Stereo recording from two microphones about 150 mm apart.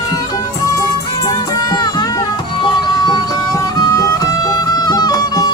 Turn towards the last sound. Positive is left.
turn(degrees=25)  # may be behind; listen again after turning